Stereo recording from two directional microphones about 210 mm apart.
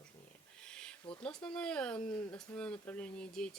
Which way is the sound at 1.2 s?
5° left (ahead or behind).